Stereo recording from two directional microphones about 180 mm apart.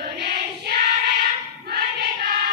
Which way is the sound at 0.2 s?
60° right (ahead or behind).